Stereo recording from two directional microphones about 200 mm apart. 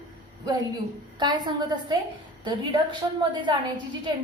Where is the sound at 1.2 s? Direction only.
20° right (ahead or behind).